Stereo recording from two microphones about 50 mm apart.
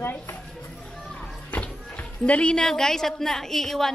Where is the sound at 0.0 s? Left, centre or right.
Left.